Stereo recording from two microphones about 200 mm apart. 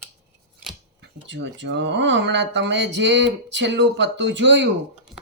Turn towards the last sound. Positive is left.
turn(degrees=-60)  # may be behind; listen again after turning